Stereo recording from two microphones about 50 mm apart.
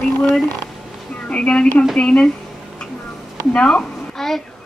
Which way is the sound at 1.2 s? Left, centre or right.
Left.